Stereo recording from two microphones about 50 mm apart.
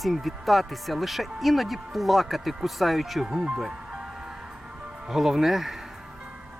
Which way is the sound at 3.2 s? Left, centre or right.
Centre.